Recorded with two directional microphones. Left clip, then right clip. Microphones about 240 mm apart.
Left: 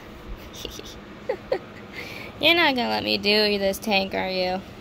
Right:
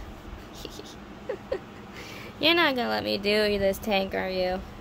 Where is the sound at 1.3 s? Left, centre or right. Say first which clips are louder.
Left 6 dB; centre.